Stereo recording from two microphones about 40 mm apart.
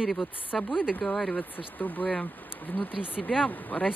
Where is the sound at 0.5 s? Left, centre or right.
Centre.